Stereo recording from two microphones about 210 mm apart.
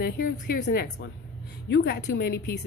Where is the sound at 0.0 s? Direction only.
45° left (ahead or behind).